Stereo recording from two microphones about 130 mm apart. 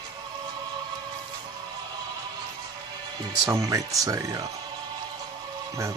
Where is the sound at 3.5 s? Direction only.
25° right (ahead or behind).